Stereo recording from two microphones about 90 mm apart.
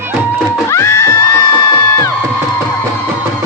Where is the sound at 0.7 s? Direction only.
30° left (ahead or behind).